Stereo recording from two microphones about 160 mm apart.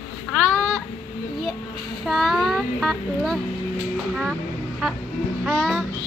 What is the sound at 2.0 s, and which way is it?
A child's voice, centre (ahead or behind).